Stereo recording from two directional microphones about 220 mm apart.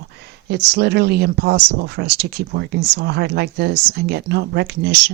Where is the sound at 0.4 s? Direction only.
50° right (ahead or behind).